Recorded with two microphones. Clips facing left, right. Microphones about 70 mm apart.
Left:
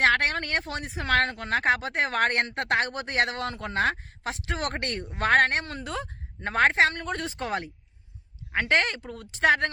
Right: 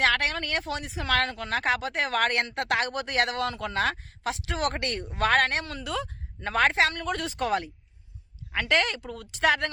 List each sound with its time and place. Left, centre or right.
0.0 s speech: left